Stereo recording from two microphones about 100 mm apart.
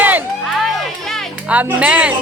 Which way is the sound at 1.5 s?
15° right (ahead or behind).